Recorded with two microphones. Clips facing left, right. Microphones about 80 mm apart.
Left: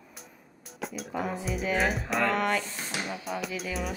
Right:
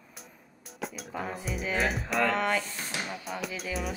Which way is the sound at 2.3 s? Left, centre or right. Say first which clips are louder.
Left 1 dB; right.